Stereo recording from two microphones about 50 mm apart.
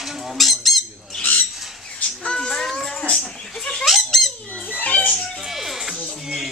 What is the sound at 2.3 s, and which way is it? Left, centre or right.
Music, centre.